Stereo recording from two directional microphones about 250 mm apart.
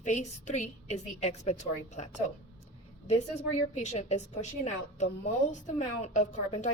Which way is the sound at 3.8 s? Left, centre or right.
Left.